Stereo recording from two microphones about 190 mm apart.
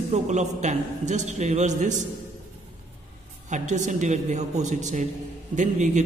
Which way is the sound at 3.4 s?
40° right (ahead or behind).